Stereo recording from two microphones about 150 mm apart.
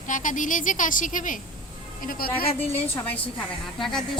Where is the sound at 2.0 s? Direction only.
70° left (ahead or behind).